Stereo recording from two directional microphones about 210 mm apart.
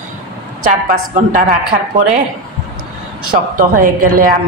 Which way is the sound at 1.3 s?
40° right (ahead or behind).